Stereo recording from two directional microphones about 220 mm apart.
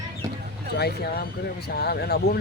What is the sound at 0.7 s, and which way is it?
Speech, 45° left (ahead or behind).